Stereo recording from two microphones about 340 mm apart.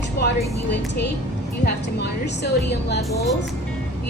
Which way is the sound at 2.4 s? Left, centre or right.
Left.